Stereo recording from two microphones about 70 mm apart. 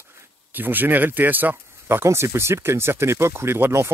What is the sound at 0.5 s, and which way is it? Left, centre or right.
Speech, right.